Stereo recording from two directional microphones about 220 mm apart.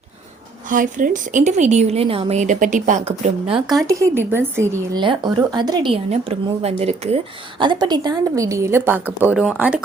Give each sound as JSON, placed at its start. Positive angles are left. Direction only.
{"t": 0.7, "sound": "a woman's voice", "side_deg": -40}
{"t": 3.8, "sound": "a woman's voice", "side_deg": -15}